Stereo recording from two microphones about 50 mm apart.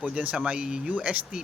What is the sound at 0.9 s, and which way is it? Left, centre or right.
Speech, right.